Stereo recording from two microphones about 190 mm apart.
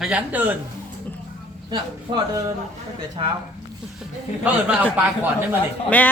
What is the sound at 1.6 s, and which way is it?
Speech, 20° right (ahead or behind).